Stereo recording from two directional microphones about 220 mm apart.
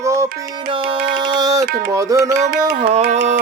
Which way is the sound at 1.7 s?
45° right (ahead or behind).